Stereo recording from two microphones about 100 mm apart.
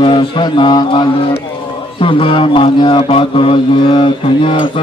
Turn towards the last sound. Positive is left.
turn(degrees=55)  # may be behind; listen again after turning